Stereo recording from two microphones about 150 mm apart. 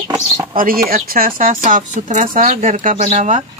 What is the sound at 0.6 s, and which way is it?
Speech, 70° right (ahead or behind).